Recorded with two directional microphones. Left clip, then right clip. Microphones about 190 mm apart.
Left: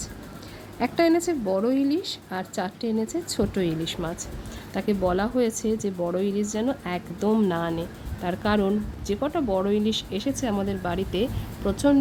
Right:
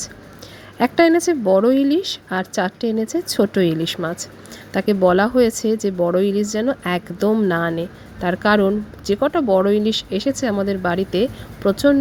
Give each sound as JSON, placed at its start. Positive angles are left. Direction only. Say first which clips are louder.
{"t": 0.8, "sound": "speech", "louder": "right 7 dB", "side_deg": -25}